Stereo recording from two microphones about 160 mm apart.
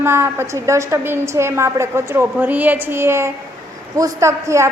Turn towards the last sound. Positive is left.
turn(degrees=-20)  # may be behind; listen again after turning